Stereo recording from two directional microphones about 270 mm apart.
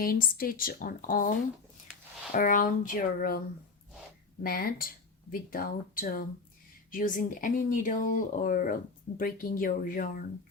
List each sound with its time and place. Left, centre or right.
0.0 s speech: left
4.4 s speech: left